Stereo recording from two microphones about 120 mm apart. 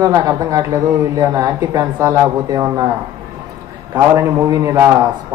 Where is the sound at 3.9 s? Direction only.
25° right (ahead or behind).